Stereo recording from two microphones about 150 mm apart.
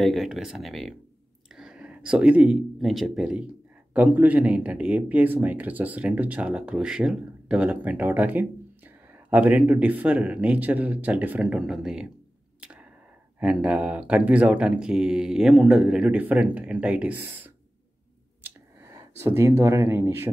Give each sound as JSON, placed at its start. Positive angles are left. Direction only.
{"t": 0.0, "sound": "speech", "side_deg": 0}
{"t": 12.5, "sound": "arrow", "side_deg": -10}
{"t": 13.4, "sound": "speech", "side_deg": -10}
{"t": 18.4, "sound": "a sound", "side_deg": -15}